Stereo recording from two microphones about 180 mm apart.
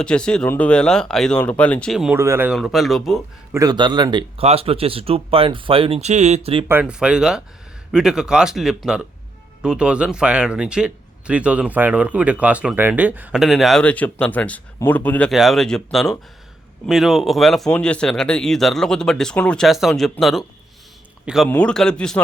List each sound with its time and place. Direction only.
0.0 s speech: 5° left (ahead or behind)
2.1 s speech: 15° right (ahead or behind)
2.5 s speech: centre (ahead or behind)
3.5 s speech: 20° right (ahead or behind)
6.7 s speech: 10° right (ahead or behind)